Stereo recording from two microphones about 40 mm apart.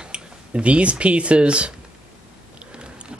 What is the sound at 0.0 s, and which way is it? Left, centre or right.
Speech, right.